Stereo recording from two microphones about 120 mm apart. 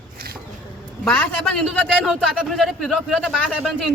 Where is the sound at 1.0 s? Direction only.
10° left (ahead or behind).